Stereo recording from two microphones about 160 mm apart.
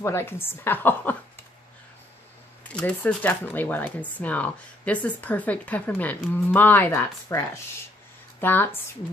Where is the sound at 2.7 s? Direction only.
10° left (ahead or behind).